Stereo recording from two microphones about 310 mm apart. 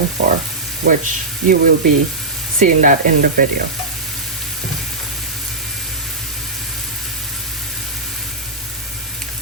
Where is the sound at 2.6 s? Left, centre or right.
Right.